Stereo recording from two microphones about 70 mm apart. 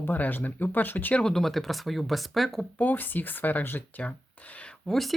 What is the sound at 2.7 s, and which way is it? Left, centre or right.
Speech, left.